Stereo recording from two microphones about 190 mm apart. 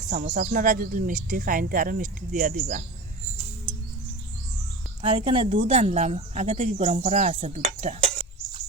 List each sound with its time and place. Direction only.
0.1 s speech: 45° right (ahead or behind)
5.0 s speech: 30° right (ahead or behind)